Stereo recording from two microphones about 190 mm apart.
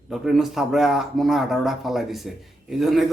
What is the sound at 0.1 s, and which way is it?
Speech, centre (ahead or behind).